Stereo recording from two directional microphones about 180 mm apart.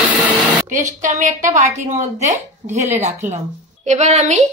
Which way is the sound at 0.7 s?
45° right (ahead or behind).